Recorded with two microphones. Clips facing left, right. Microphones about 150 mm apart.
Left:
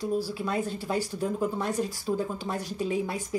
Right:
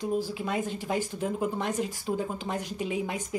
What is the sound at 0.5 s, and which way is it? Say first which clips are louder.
Speech: left 1 dB; 40° left (ahead or behind).